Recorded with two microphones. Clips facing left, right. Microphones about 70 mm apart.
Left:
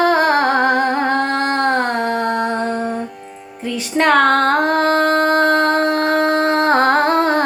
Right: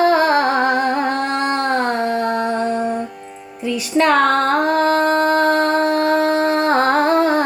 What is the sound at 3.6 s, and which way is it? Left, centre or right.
Music, left.